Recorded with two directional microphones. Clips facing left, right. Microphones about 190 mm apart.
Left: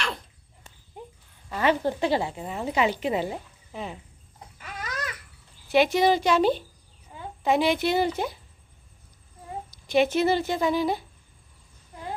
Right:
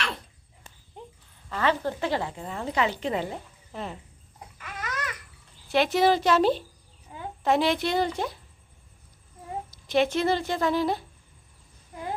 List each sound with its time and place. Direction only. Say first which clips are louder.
0.9 s livestock: left 2 dB; 5° left (ahead or behind)
1.5 s speech: left 2 dB; 15° left (ahead or behind)
4.6 s a sound: even; 35° left (ahead or behind)
5.6 s speech: left 1 dB; centre (ahead or behind)
9.7 s speech: left 2 dB; centre (ahead or behind)